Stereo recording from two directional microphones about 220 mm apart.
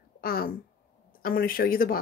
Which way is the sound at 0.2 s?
40° left (ahead or behind).